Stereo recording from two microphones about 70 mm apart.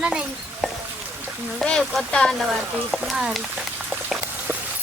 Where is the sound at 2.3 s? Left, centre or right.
Centre.